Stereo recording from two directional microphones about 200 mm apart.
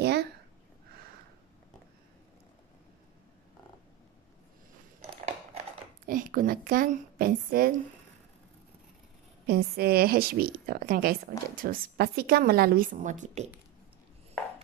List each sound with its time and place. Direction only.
0.0 s a sound: 55° right (ahead or behind)
6.0 s a woman's voice: 45° right (ahead or behind)
9.5 s a woman's voice: 50° right (ahead or behind)